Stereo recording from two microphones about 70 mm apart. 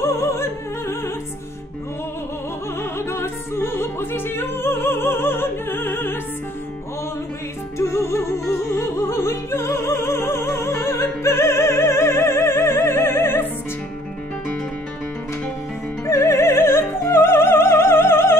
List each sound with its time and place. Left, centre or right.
0.0 s music: left
2.8 s opera: left
7.7 s music: left
16.1 s opera: left